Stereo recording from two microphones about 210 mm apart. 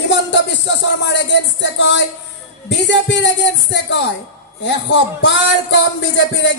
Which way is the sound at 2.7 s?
60° left (ahead or behind).